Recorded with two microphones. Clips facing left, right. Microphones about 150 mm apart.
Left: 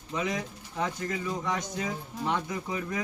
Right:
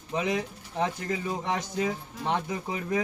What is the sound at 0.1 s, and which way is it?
A man's voice, 30° right (ahead or behind).